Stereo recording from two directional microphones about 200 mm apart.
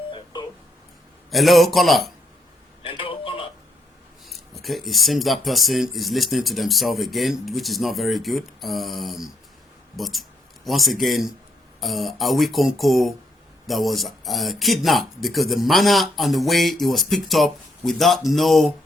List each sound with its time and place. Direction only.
1.3 s speech: centre (ahead or behind)
2.8 s a sound: 25° left (ahead or behind)
4.3 s speech: centre (ahead or behind)